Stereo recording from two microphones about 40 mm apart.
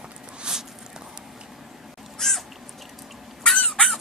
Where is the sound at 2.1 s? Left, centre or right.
Centre.